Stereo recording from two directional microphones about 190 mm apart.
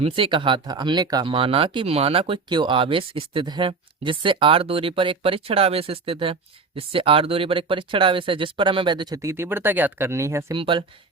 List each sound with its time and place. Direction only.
0.0 s speech: 25° right (ahead or behind)
10.6 s speech: 25° right (ahead or behind)